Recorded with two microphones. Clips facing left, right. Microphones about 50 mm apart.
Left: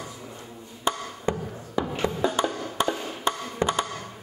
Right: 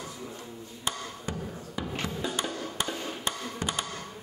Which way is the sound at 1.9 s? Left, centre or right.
Centre.